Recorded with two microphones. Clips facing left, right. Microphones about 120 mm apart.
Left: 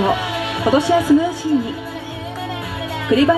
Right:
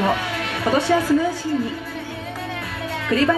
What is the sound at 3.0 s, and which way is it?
Speech, 25° left (ahead or behind).